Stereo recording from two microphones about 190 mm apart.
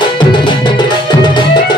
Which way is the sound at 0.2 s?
25° left (ahead or behind).